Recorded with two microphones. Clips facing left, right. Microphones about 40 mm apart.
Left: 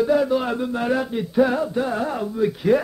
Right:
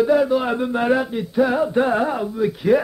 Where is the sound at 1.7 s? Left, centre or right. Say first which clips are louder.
Right 5 dB; right.